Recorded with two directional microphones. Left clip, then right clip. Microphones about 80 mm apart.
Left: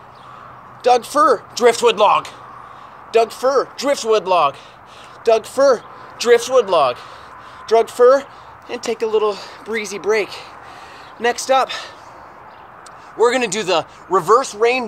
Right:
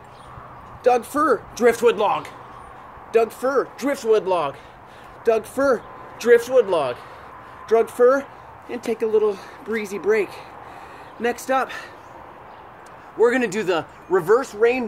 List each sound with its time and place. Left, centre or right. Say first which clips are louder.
0.8 s speech: left 5 dB; right
2.0 s speech: left 7 dB; centre
3.1 s speech: left 4 dB; right
3.3 s speech: left 5 dB; right
4.1 s speech: left 4 dB; centre
5.2 s speech: left 6 dB; right
6.3 s speech: left 2 dB; centre
7.6 s speech: left 4 dB; right
13.2 s speech: left 3 dB; right